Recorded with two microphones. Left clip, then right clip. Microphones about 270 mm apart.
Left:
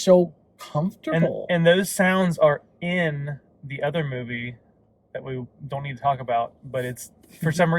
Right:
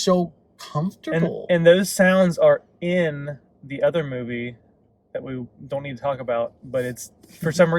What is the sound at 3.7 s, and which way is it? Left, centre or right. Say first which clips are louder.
Speech: right 5 dB; centre.